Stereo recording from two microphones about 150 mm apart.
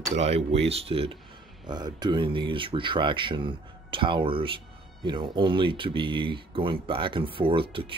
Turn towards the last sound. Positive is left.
turn(degrees=-35)  # may be behind; listen again after turning